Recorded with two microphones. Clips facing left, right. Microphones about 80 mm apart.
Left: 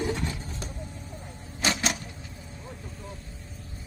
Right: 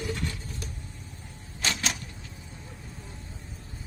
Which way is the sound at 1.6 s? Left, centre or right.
Centre.